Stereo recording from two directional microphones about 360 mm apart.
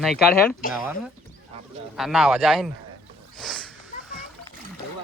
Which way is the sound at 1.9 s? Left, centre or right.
Centre.